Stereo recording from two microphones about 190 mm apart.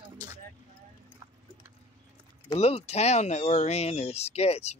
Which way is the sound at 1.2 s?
20° right (ahead or behind).